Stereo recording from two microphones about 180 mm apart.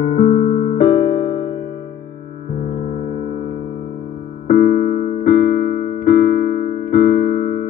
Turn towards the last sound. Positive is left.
turn(degrees=50)  # may be behind; listen again after turning